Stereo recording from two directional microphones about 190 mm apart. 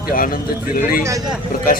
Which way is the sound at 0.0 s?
50° left (ahead or behind).